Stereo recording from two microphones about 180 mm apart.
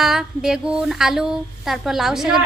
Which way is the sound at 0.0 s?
Centre (ahead or behind).